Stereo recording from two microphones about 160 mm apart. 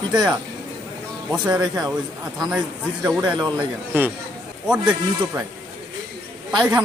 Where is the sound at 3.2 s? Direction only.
25° right (ahead or behind).